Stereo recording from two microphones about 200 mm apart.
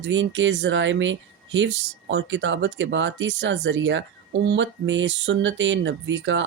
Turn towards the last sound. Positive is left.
turn(degrees=-65)  # may be behind; listen again after turning